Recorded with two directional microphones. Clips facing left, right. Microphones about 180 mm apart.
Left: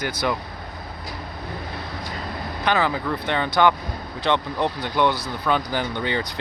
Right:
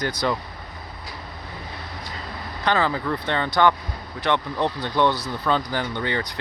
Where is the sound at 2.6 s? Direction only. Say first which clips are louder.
Even; 15° left (ahead or behind).